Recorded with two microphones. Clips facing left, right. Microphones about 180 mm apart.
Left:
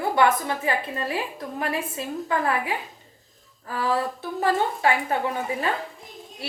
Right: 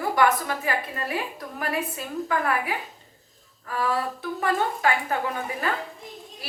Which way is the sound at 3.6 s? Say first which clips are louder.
Left 1 dB; 30° left (ahead or behind).